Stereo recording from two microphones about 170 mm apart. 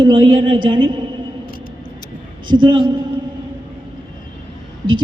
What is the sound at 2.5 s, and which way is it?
Speech, 25° right (ahead or behind).